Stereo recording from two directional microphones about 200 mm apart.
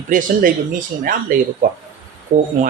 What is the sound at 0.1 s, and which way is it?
Speech, 40° right (ahead or behind).